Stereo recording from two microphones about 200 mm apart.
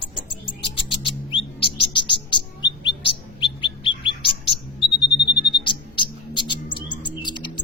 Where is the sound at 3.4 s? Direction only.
25° left (ahead or behind).